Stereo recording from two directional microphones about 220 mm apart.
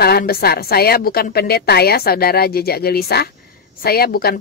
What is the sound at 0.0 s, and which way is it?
A woman's voice, 45° left (ahead or behind).